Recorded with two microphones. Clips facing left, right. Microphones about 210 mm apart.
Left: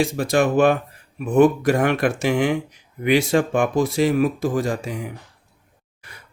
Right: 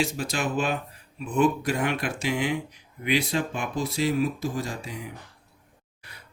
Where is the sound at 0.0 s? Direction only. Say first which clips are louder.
Left 9 dB; 55° left (ahead or behind); by 4.9 s 90° left.